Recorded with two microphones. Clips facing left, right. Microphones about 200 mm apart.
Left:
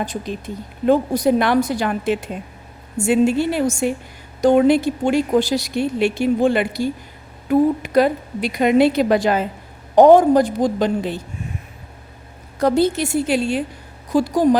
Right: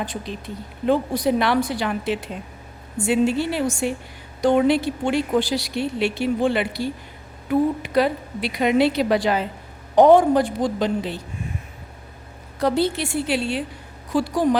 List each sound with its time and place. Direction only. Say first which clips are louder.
0.0 s speech: left 4 dB; 45° left (ahead or behind)
12.5 s speech: left 4 dB; 45° left (ahead or behind)